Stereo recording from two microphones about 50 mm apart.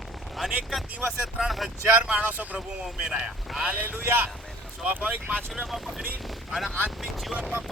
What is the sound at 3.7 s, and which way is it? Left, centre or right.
Speech, right.